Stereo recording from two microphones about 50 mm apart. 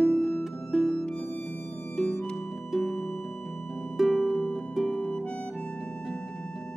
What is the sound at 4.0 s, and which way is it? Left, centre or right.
Harp, centre.